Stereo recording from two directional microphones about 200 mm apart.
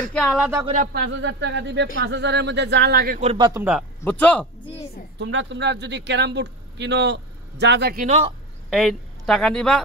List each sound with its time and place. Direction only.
0.1 s speech: centre (ahead or behind)
0.7 s speech: 55° right (ahead or behind)
3.2 s a man's voice: 25° right (ahead or behind)
4.0 s speech: 10° left (ahead or behind)
5.2 s speech: 65° right (ahead or behind); by 8.2 s 45° right (ahead or behind)
8.6 s a woman's voice: centre (ahead or behind)